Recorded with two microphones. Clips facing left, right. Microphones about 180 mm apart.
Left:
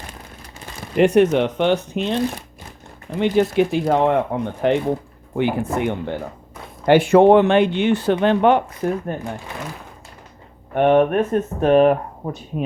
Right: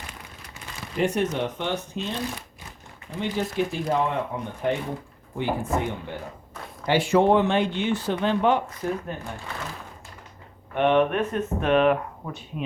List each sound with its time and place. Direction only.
0.9 s speech: 70° left (ahead or behind)
3.2 s speech: 70° left (ahead or behind)
6.8 s speech: 55° left (ahead or behind)
10.8 s speech: 45° left (ahead or behind)